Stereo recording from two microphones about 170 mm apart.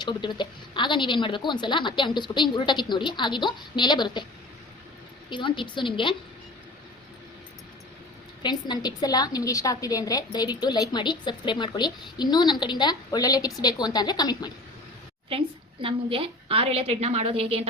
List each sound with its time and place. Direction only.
0.0 s a woman's voice: 25° left (ahead or behind)
5.3 s a woman's voice: 30° left (ahead or behind)
8.4 s a woman's voice: 25° left (ahead or behind)
15.3 s a woman's voice: 30° right (ahead or behind)